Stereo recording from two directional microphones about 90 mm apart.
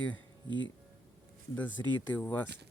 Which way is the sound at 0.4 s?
60° right (ahead or behind).